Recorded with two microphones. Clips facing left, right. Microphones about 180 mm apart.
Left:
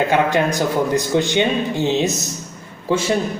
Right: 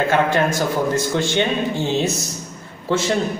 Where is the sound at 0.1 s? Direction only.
15° left (ahead or behind).